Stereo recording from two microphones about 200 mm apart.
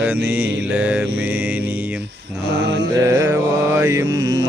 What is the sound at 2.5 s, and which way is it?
Mantra, 60° right (ahead or behind).